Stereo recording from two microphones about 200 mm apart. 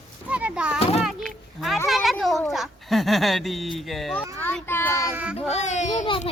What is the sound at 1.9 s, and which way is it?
A child's voice, centre (ahead or behind).